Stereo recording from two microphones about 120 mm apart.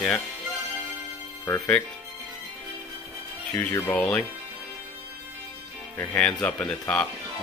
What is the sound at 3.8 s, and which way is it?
Speech, 15° left (ahead or behind).